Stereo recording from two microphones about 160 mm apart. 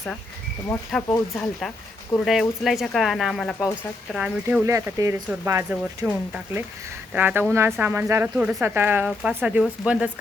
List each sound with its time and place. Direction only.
0.9 s speech: 5° left (ahead or behind)
4.6 s speech: 20° right (ahead or behind)